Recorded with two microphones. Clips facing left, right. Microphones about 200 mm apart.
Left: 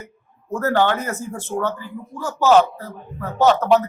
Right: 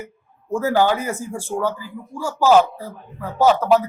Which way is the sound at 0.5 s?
10° right (ahead or behind).